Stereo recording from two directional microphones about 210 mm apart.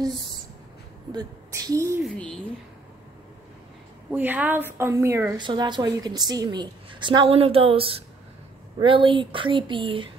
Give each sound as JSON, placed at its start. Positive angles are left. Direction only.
{"t": 1.1, "sound": "a woman's voice", "side_deg": -15}
{"t": 2.0, "sound": "speech", "side_deg": 5}
{"t": 4.1, "sound": "a woman's voice", "side_deg": -10}